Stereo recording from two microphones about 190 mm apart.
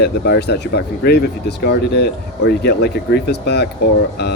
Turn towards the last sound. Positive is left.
turn(degrees=60)  # may be behind; listen again after turning